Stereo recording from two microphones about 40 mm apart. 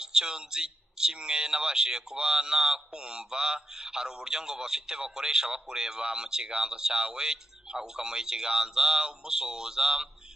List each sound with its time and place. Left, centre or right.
0.0 s speech: centre